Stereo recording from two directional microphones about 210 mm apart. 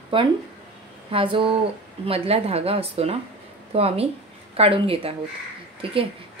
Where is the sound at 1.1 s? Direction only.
25° right (ahead or behind).